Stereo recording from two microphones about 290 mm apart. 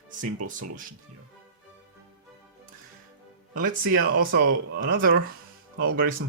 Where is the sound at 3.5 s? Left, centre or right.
Right.